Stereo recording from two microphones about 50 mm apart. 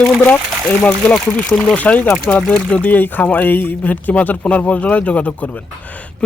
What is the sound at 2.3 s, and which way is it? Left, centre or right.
Speech, centre.